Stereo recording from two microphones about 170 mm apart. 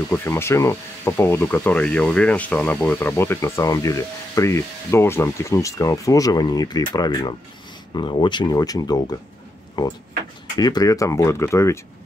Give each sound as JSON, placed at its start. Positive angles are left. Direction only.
{"t": 0.1, "sound": "speech", "side_deg": 15}
{"t": 10.6, "sound": "speech", "side_deg": 20}